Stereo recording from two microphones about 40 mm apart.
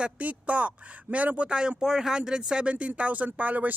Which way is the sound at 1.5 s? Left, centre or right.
Right.